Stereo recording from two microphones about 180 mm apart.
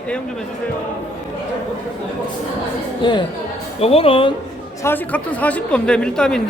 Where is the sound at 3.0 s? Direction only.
25° left (ahead or behind).